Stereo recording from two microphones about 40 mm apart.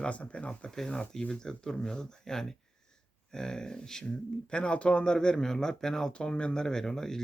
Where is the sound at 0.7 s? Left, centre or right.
Centre.